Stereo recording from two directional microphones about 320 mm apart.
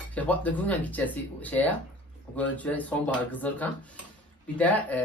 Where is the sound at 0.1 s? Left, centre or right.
Centre.